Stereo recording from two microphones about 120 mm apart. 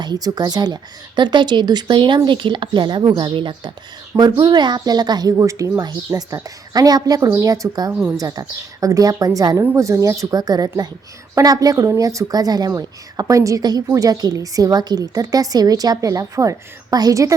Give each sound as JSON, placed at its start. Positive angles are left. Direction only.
{"t": 0.0, "sound": "a woman's voice", "side_deg": -35}
{"t": 7.9, "sound": "speech", "side_deg": -5}
{"t": 8.2, "sound": "a woman's voice", "side_deg": -30}